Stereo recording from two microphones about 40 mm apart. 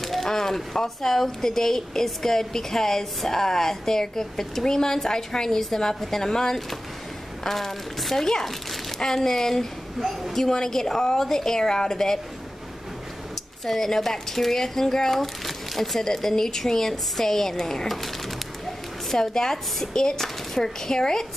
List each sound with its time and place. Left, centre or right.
0.0 s speech: centre
9.9 s a woman's voice: centre
10.5 s speech: centre
13.7 s speech: centre